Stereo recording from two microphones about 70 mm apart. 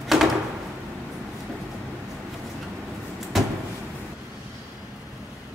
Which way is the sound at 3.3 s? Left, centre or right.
Centre.